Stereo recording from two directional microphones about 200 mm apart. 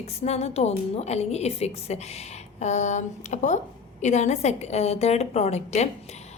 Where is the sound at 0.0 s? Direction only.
30° left (ahead or behind).